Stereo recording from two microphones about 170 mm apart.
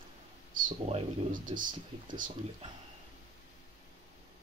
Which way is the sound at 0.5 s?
50° right (ahead or behind).